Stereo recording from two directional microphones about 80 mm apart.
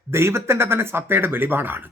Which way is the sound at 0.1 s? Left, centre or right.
Right.